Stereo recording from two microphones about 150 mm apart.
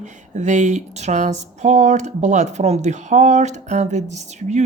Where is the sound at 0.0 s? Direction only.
55° right (ahead or behind).